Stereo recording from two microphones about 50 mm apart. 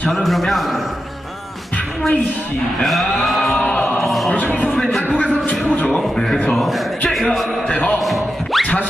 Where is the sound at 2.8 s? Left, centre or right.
Centre.